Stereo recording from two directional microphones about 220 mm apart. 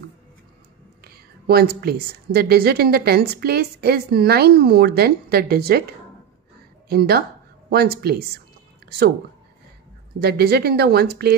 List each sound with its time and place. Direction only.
1.0 s a woman's voice: 45° right (ahead or behind)
6.9 s a woman's voice: 45° right (ahead or behind)
10.2 s a woman's voice: 45° right (ahead or behind)